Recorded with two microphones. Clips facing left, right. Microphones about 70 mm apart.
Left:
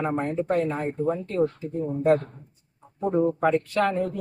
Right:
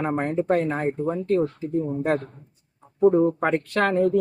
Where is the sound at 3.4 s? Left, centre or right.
Right.